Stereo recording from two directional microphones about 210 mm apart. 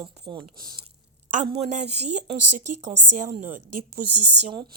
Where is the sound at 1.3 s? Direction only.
30° right (ahead or behind).